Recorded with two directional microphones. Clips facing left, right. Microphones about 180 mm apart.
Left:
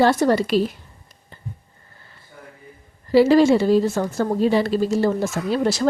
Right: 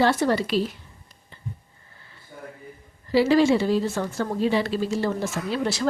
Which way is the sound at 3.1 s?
45° left (ahead or behind).